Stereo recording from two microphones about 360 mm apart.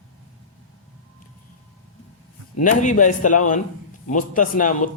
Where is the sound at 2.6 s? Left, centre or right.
Left.